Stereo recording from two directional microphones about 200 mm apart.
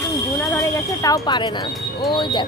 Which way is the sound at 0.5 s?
15° left (ahead or behind).